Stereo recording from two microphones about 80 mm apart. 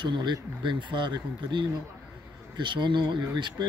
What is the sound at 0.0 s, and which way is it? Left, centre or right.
Speech, right.